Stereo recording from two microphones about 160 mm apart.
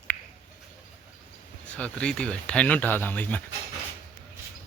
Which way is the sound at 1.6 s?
10° left (ahead or behind).